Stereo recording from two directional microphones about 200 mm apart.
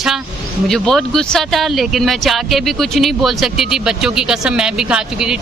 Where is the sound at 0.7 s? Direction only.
Centre (ahead or behind).